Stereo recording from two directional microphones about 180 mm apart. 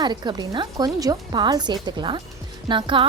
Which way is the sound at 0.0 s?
25° right (ahead or behind).